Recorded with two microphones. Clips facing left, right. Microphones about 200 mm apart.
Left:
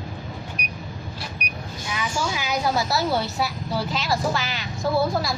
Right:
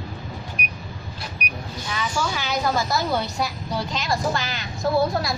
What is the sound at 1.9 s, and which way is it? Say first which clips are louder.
Speech: right 1 dB; 10° left (ahead or behind).